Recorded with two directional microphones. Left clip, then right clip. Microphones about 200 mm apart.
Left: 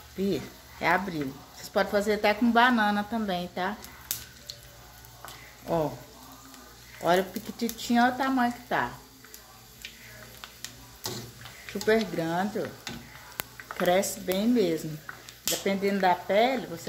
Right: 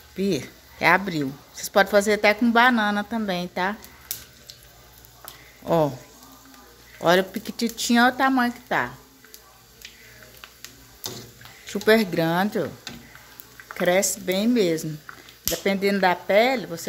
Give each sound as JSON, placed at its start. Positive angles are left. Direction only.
{"t": 0.2, "sound": "speech", "side_deg": -40}
{"t": 7.0, "sound": "speech", "side_deg": -45}
{"t": 11.7, "sound": "speech", "side_deg": -50}
{"t": 13.7, "sound": "speech", "side_deg": -35}